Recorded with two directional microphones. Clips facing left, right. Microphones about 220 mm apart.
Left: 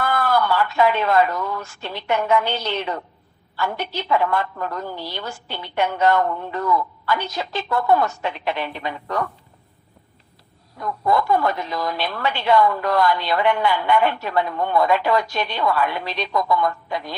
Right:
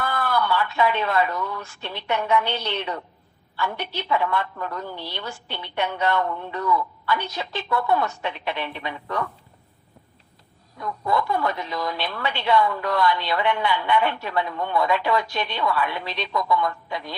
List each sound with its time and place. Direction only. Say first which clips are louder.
0.0 s a woman's voice: left 4 dB; 45° left (ahead or behind)
10.8 s a woman's voice: left 4 dB; 45° left (ahead or behind)